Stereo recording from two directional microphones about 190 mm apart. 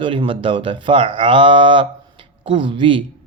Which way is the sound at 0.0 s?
25° right (ahead or behind).